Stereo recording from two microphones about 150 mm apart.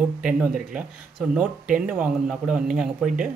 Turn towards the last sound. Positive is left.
turn(degrees=-5)  # may be behind; listen again after turning